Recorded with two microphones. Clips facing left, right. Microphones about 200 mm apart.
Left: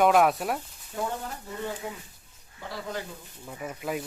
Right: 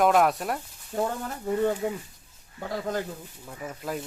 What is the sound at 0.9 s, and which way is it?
Speech, 50° right (ahead or behind).